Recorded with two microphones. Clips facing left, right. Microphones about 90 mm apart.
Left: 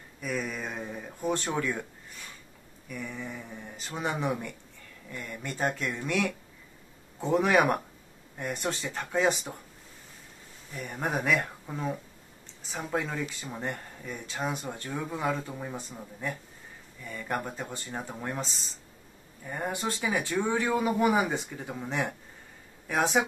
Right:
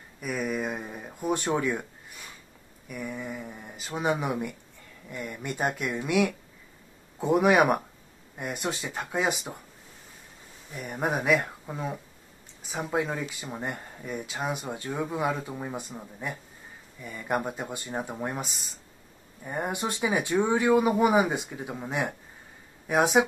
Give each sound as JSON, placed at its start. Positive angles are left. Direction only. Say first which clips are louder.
{"t": 0.2, "sound": "a sound", "louder": "right 3 dB", "side_deg": -5}
{"t": 2.9, "sound": "speech", "louder": "right 3 dB", "side_deg": -10}
{"t": 10.7, "sound": "speech", "louder": "right 3 dB", "side_deg": -10}